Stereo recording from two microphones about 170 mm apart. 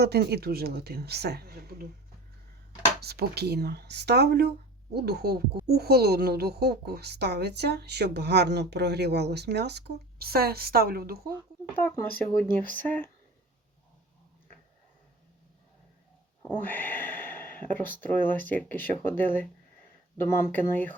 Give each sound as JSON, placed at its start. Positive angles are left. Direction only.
{"t": 0.0, "sound": "speech", "side_deg": -70}
{"t": 3.0, "sound": "speech", "side_deg": -70}
{"t": 12.2, "sound": "speech", "side_deg": 5}
{"t": 16.4, "sound": "a sound", "side_deg": 10}
{"t": 18.0, "sound": "speech", "side_deg": 10}